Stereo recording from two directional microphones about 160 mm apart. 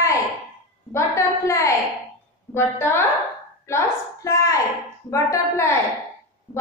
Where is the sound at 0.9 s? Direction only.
15° left (ahead or behind).